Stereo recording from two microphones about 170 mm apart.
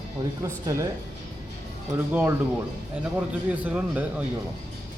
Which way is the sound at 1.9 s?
10° right (ahead or behind).